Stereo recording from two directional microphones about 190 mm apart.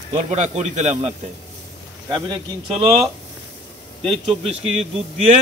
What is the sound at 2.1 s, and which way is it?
Speech, 20° right (ahead or behind).